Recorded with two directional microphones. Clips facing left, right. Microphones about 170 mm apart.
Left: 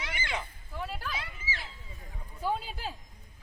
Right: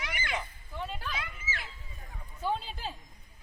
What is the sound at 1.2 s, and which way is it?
Children playing, 30° left (ahead or behind).